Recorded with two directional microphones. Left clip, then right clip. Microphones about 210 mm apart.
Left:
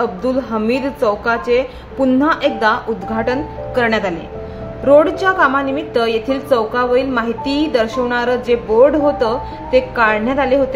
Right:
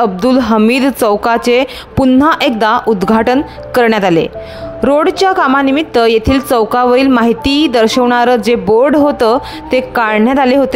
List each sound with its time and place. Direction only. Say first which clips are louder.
0.0 s a woman's voice: right 7 dB; 45° right (ahead or behind)